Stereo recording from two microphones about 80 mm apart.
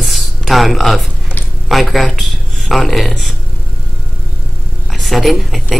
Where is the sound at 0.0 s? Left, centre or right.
Centre.